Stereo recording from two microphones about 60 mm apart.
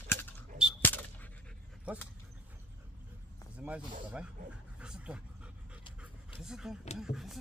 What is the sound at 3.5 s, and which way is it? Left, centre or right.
Speech, right.